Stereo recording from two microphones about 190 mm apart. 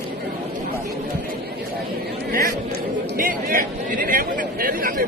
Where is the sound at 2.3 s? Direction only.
50° right (ahead or behind).